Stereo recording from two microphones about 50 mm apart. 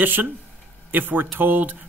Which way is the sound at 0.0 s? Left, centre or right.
Right.